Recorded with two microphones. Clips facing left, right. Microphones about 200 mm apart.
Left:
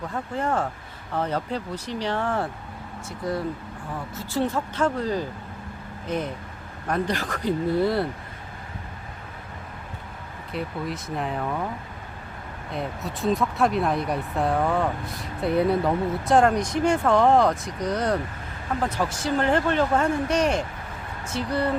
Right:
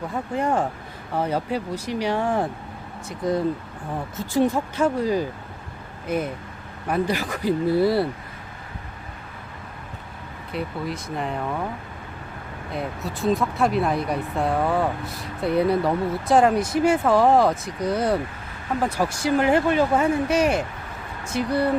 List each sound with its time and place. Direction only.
0.1 s speech: 15° right (ahead or behind)
10.5 s speech: centre (ahead or behind)
12.7 s speech: centre (ahead or behind)